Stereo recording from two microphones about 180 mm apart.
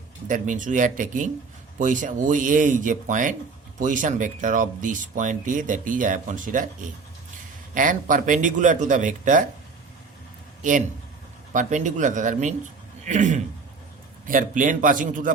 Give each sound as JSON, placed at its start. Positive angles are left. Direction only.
{"t": 0.3, "sound": "speech", "side_deg": -45}
{"t": 10.6, "sound": "speech", "side_deg": -45}